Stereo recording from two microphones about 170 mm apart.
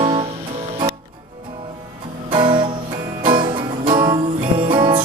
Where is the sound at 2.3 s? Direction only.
30° right (ahead or behind).